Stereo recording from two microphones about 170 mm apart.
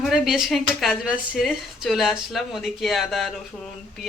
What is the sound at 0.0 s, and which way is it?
Speech, centre (ahead or behind).